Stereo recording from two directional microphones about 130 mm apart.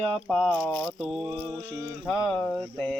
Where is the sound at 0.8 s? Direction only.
5° right (ahead or behind).